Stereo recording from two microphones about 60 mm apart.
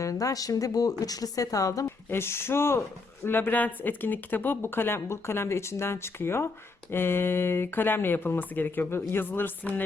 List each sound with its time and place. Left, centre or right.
0.0 s a woman's voice: left
2.0 s speech: left
3.2 s speech: left